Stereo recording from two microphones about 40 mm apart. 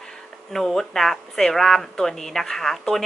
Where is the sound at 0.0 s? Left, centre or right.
Centre.